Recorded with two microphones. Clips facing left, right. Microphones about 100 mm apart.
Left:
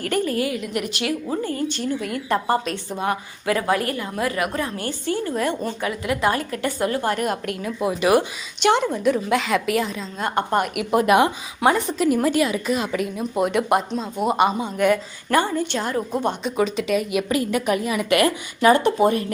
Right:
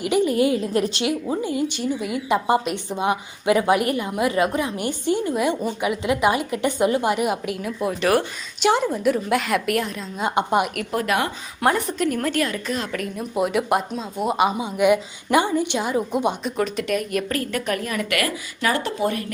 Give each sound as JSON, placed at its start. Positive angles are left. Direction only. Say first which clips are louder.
{"t": 0.0, "sound": "a woman's voice", "louder": "right 4 dB", "side_deg": -15}
{"t": 1.3, "sound": "speech", "louder": "right 1 dB", "side_deg": -10}
{"t": 8.6, "sound": "a woman's voice", "louder": "left 1 dB", "side_deg": -5}
{"t": 10.2, "sound": "speech", "louder": "right 1 dB", "side_deg": -15}
{"t": 10.9, "sound": "speech", "louder": "left 7 dB", "side_deg": 20}
{"t": 11.6, "sound": "a woman's voice", "louder": "left 2 dB", "side_deg": 0}
{"t": 14.7, "sound": "a woman's voice", "louder": "right 1 dB", "side_deg": -15}
{"t": 18.1, "sound": "speech", "louder": "left 6 dB", "side_deg": 25}